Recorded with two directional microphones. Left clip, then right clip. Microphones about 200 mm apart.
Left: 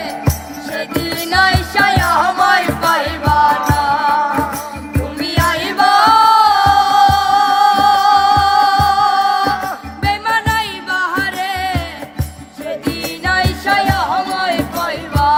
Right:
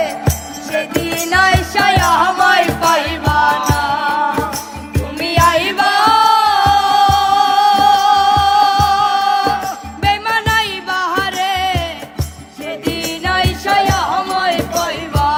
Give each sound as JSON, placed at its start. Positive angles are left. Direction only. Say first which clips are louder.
{"t": 0.8, "sound": "music", "louder": "right 2 dB", "side_deg": -15}
{"t": 5.2, "sound": "music", "louder": "right 5 dB", "side_deg": -15}